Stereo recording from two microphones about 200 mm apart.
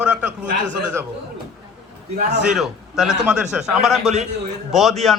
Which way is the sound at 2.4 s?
Centre (ahead or behind).